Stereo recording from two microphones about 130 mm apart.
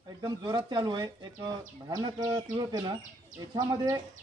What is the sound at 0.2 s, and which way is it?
Speech, 30° right (ahead or behind).